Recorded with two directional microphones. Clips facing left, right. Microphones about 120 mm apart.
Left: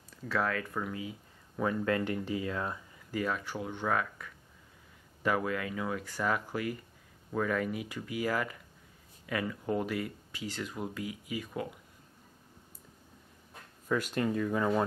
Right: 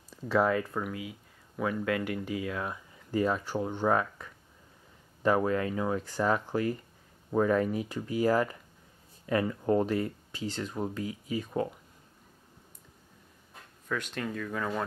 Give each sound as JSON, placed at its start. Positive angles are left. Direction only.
{"t": 0.2, "sound": "speech", "side_deg": -20}
{"t": 3.1, "sound": "speech", "side_deg": -25}
{"t": 3.8, "sound": "speech", "side_deg": -20}
{"t": 13.8, "sound": "speech", "side_deg": 5}